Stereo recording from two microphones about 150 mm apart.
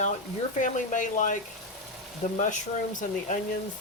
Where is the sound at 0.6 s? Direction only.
60° left (ahead or behind).